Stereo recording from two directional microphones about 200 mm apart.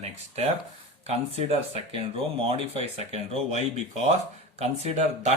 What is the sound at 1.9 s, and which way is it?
Speech, 25° right (ahead or behind).